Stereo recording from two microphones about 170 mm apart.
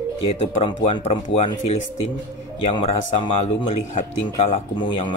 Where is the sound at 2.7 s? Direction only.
30° left (ahead or behind).